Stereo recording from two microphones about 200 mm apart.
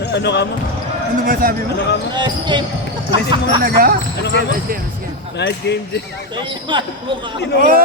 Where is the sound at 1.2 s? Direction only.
45° right (ahead or behind).